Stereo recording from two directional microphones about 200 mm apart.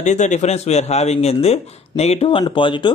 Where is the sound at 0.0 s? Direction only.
35° left (ahead or behind).